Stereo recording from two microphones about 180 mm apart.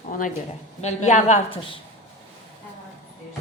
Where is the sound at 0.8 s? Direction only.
40° left (ahead or behind).